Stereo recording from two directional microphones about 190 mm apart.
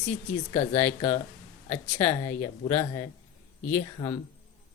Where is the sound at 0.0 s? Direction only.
10° left (ahead or behind).